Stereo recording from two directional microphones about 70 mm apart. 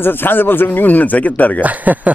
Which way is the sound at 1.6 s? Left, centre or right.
Right.